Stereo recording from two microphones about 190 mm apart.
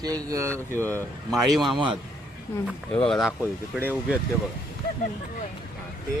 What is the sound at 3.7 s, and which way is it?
Speech, 10° right (ahead or behind).